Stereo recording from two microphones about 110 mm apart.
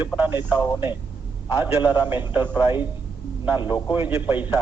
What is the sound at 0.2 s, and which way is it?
A man's voice, 15° right (ahead or behind).